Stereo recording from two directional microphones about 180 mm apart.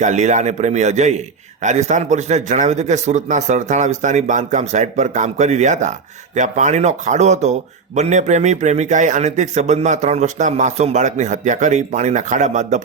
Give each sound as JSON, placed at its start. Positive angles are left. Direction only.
{"t": 0.0, "sound": "speech", "side_deg": -40}